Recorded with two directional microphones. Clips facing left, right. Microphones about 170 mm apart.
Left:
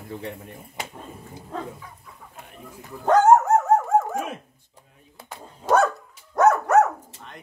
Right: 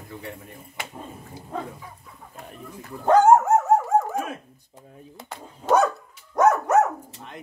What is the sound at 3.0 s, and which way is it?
Speech, 10° right (ahead or behind).